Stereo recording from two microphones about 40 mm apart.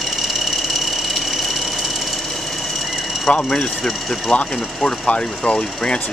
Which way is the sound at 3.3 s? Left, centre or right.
Left.